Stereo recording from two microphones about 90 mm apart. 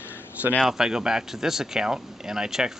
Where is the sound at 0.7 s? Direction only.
5° right (ahead or behind).